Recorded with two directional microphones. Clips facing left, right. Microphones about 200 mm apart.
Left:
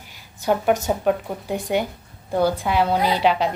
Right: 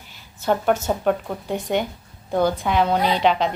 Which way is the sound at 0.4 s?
10° left (ahead or behind).